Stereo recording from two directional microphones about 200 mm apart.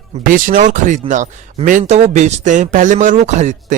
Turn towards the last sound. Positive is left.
turn(degrees=-35)  # may be behind; listen again after turning